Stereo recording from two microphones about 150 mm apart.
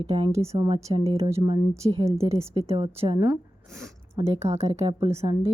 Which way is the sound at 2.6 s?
40° right (ahead or behind).